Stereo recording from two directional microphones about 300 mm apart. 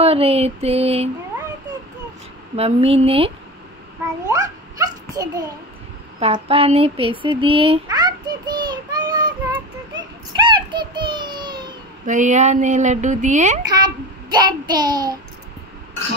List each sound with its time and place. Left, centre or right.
0.0 s speech: centre
2.5 s speech: centre
4.3 s a sound: centre
12.1 s speech: right
13.7 s a child's voice: centre